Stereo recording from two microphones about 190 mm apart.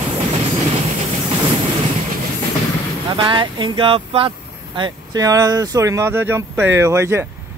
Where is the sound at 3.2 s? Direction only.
25° right (ahead or behind).